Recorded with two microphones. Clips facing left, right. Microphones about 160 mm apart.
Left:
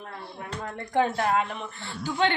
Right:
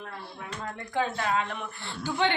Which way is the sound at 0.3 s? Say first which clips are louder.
Left 3 dB; 35° left (ahead or behind).